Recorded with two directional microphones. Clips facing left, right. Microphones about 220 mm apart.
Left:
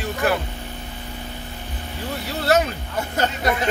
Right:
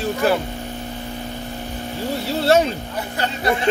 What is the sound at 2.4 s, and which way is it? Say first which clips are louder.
Speech: right 3 dB; 30° right (ahead or behind).